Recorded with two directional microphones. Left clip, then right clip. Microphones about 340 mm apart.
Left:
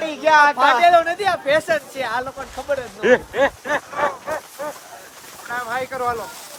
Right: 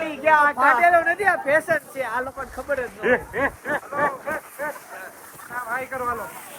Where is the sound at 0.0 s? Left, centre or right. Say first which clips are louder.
Left 4 dB; left.